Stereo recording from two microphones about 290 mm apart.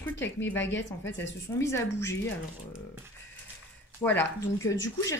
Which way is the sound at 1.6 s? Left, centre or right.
Centre.